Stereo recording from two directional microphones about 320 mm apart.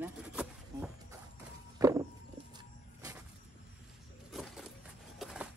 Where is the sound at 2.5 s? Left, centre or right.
Centre.